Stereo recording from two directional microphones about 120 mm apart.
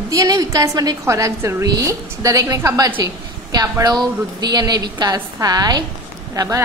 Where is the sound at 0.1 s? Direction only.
30° right (ahead or behind).